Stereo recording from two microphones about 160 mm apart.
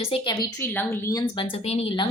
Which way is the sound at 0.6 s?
15° left (ahead or behind).